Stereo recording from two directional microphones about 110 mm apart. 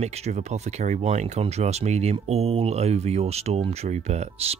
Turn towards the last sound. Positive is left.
turn(degrees=-80)